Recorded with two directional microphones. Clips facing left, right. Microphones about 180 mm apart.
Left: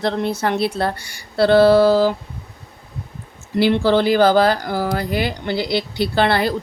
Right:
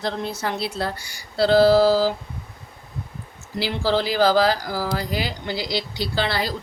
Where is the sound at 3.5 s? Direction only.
60° left (ahead or behind).